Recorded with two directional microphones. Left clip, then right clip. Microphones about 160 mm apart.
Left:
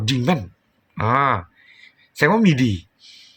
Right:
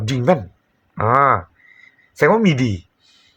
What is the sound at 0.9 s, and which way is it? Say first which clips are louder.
Speech: right 4 dB; 15° left (ahead or behind).